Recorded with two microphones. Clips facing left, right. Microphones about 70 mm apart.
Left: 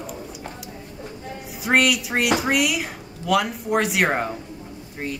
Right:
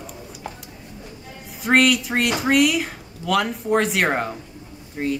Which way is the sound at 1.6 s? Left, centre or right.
Centre.